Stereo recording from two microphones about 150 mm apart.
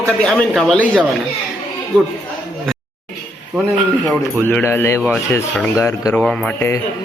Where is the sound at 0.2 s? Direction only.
5° left (ahead or behind).